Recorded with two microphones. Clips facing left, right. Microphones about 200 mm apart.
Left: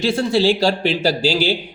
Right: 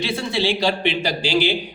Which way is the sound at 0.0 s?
45° left (ahead or behind).